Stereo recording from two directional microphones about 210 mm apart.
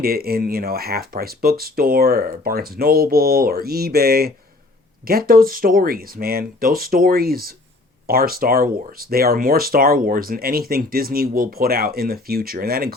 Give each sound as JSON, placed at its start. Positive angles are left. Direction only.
{"t": 0.0, "sound": "speech", "side_deg": -45}